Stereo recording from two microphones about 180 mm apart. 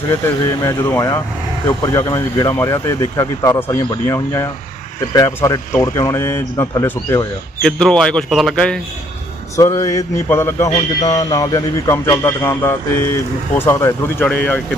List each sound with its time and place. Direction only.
0.6 s a man's voice: 15° left (ahead or behind)
7.6 s speech: 5° left (ahead or behind)
9.6 s a sound: 20° left (ahead or behind)
10.8 s a man's voice: 20° left (ahead or behind)